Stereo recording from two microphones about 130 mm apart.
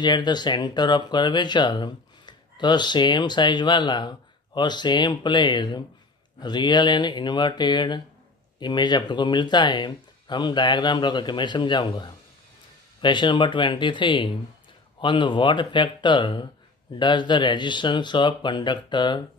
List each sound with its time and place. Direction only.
0.0 s speech: 35° left (ahead or behind)